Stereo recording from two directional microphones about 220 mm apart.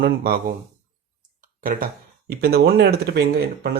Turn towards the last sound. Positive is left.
turn(degrees=-45)  # may be behind; listen again after turning